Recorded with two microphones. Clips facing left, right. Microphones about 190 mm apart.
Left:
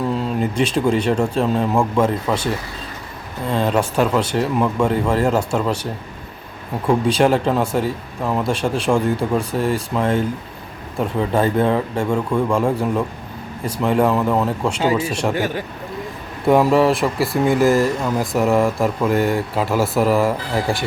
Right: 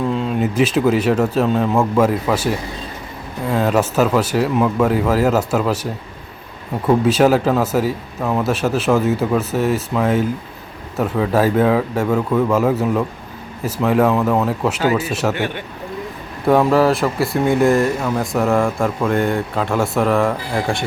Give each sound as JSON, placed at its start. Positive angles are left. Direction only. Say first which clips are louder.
{"t": 0.3, "sound": "speech", "louder": "right 4 dB", "side_deg": -5}
{"t": 6.8, "sound": "speech", "louder": "right 2 dB", "side_deg": -5}
{"t": 15.3, "sound": "speech", "louder": "left 1 dB", "side_deg": 40}
{"t": 16.5, "sound": "speech", "louder": "even", "side_deg": 0}